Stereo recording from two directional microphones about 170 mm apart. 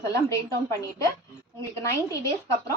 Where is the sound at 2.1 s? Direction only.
20° left (ahead or behind).